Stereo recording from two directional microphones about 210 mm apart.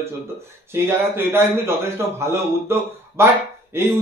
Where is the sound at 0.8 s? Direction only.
10° right (ahead or behind).